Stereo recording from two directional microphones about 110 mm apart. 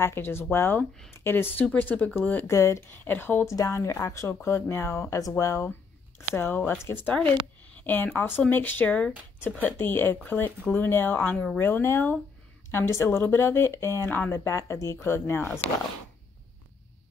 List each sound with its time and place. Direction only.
0.0 s a woman's voice: 20° left (ahead or behind)